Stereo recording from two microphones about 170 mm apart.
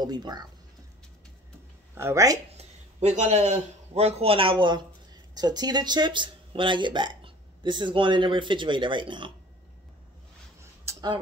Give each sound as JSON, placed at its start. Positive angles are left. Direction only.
{"t": 0.0, "sound": "speech", "side_deg": -25}
{"t": 2.0, "sound": "speech", "side_deg": -15}
{"t": 2.5, "sound": "a man's voice", "side_deg": -40}
{"t": 10.6, "sound": "a sound", "side_deg": -20}